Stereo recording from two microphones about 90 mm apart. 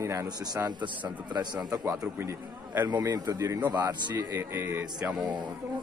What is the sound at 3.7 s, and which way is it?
Speech, 50° right (ahead or behind).